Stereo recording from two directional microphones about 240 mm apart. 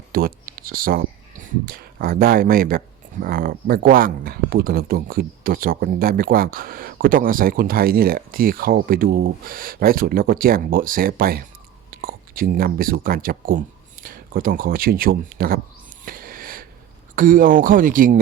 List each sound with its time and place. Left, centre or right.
0.1 s speech: right
16.0 s wheeze: right
17.2 s speech: right